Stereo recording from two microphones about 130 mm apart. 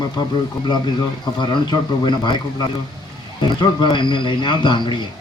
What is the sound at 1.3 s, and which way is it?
Speech, 40° left (ahead or behind).